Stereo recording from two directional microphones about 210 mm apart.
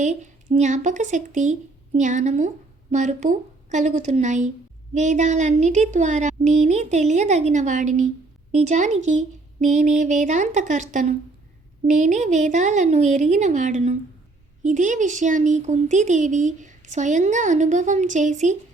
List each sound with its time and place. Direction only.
0.0 s speech: 35° right (ahead or behind)